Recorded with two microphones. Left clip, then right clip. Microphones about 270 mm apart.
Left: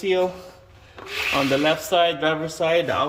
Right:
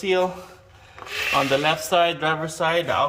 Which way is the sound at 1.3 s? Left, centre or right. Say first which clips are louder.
Even; right.